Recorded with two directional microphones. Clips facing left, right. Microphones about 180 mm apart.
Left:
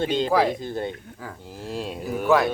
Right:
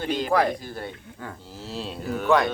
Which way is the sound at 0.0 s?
25° left (ahead or behind).